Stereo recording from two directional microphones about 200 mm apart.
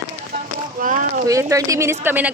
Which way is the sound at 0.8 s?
40° right (ahead or behind).